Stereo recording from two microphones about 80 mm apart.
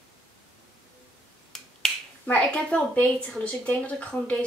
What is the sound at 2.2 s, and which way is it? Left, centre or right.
A woman's voice, centre.